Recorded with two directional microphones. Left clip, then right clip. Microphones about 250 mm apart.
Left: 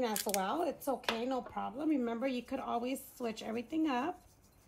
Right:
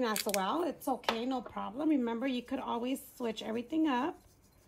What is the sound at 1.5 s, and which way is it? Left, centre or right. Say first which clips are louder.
Speech: right 2 dB; right.